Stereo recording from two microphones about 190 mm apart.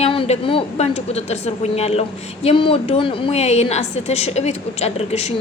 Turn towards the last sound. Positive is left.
turn(degrees=35)  # may be behind; listen again after turning